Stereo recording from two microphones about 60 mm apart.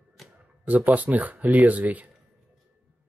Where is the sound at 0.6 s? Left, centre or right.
Right.